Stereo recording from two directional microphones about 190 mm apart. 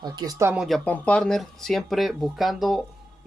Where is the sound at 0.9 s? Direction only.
5° left (ahead or behind).